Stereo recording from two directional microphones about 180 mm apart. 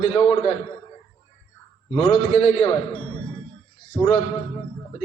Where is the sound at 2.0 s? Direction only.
35° left (ahead or behind).